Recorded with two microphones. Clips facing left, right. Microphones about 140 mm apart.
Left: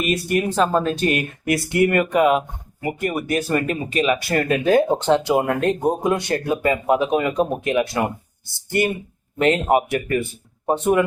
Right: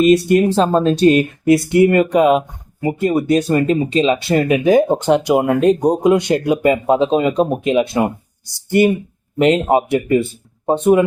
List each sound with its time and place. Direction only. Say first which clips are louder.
0.3 s speech: right 6 dB; 25° right (ahead or behind)
9.4 s speech: right 4 dB; 20° right (ahead or behind)